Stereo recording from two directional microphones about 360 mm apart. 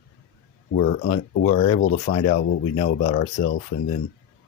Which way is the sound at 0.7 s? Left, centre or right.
Left.